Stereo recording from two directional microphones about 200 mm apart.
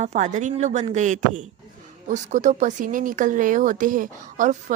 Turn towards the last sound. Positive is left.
turn(degrees=-40)  # may be behind; listen again after turning